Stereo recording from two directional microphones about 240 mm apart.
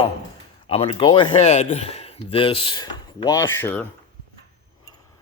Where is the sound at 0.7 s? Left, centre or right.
Left; by 3.8 s centre.